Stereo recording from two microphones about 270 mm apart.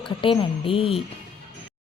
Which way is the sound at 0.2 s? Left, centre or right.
Centre.